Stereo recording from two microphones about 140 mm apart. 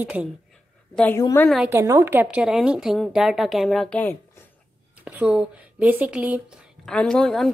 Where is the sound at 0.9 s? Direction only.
10° left (ahead or behind).